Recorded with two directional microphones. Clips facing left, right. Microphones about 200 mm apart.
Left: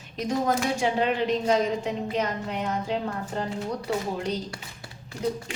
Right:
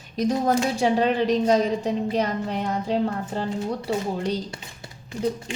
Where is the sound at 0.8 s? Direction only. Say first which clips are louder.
Right 4 dB; 35° right (ahead or behind).